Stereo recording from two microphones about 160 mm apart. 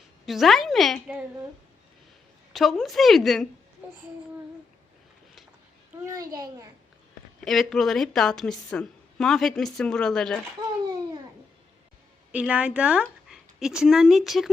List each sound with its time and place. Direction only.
0.3 s a woman's voice: centre (ahead or behind)
2.5 s a woman's voice: centre (ahead or behind)
6.0 s a child's voice: 20° right (ahead or behind)
7.4 s a woman's voice: centre (ahead or behind)
12.3 s speech: 10° right (ahead or behind)